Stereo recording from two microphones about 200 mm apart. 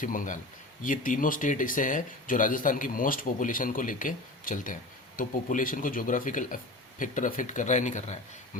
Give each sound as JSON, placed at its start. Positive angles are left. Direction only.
{"t": 0.0, "sound": "speech", "side_deg": 40}